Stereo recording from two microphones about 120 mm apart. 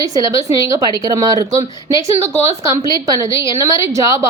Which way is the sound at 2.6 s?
25° right (ahead or behind).